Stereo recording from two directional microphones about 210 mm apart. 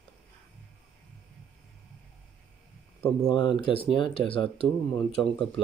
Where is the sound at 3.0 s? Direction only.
20° left (ahead or behind).